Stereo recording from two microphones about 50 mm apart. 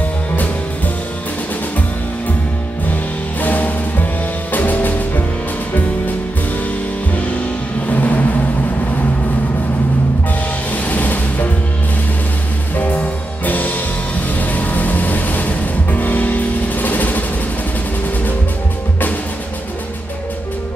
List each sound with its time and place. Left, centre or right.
2.9 s music: left
7.8 s music: left
10.7 s music: left
12.7 s music: left